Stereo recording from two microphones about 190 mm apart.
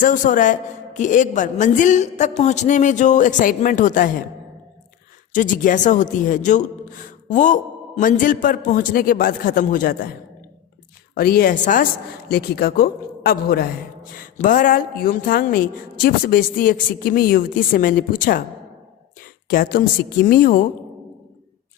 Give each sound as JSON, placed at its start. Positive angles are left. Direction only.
{"t": 0.0, "sound": "a woman's voice", "side_deg": 45}
{"t": 5.3, "sound": "a man's voice", "side_deg": 45}
{"t": 11.1, "sound": "a man's voice", "side_deg": 50}
{"t": 12.3, "sound": "a man's voice", "side_deg": 55}
{"t": 19.5, "sound": "a man's voice", "side_deg": 50}